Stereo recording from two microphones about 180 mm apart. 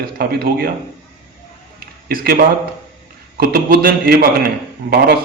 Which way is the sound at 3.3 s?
60° right (ahead or behind).